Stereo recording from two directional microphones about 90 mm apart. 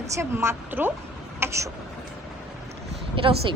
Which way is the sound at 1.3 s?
30° right (ahead or behind).